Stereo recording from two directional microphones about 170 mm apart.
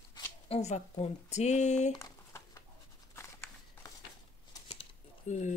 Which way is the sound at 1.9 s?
20° left (ahead or behind).